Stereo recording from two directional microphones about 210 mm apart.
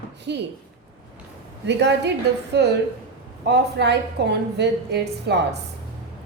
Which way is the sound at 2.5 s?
50° right (ahead or behind).